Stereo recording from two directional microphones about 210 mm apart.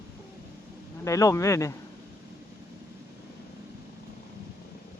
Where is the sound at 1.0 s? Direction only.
15° left (ahead or behind).